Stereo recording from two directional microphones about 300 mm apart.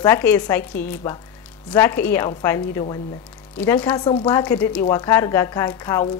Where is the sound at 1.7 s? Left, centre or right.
Centre.